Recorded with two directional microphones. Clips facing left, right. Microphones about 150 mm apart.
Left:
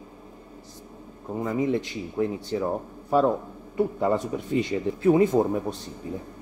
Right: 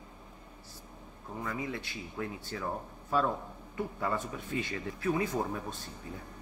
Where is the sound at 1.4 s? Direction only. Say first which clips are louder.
Left 12 dB; 25° left (ahead or behind).